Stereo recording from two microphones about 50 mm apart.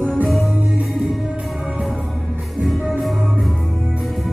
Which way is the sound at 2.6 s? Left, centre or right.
Centre.